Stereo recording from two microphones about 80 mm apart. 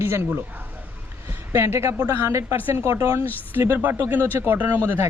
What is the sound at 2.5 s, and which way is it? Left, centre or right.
Speech, right.